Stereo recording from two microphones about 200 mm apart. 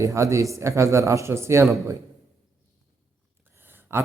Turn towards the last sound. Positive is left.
turn(degrees=-10)  # may be behind; listen again after turning